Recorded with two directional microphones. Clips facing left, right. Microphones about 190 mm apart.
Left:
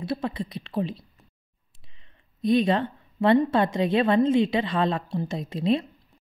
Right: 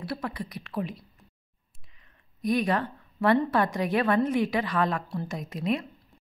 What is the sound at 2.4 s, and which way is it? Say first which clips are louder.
A woman's voice: left 4 dB; 25° left (ahead or behind).